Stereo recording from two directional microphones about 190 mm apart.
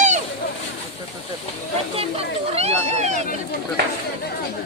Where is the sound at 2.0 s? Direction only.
30° right (ahead or behind).